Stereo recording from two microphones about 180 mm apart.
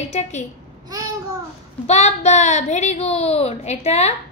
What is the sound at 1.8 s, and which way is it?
A woman's voice, 40° left (ahead or behind).